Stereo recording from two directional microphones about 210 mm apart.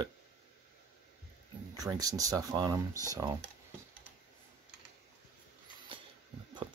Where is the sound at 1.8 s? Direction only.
15° right (ahead or behind).